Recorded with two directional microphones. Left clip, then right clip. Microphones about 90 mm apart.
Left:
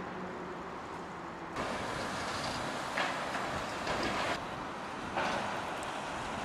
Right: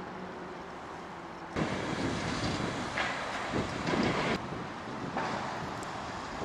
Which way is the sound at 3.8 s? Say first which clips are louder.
Right 3 dB; centre (ahead or behind).